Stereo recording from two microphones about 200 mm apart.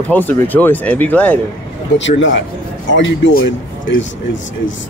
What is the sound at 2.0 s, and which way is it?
Speech, 70° left (ahead or behind).